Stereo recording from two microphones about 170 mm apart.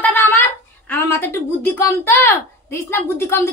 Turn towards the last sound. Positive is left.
turn(degrees=15)  # may be behind; listen again after turning